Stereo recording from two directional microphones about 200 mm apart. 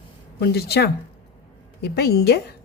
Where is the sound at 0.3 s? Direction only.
55° left (ahead or behind).